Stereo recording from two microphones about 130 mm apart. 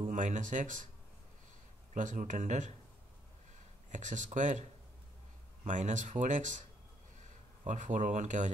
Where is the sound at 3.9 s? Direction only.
70° right (ahead or behind).